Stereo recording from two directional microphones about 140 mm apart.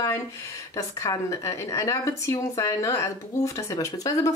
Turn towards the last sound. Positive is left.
turn(degrees=25)  # may be behind; listen again after turning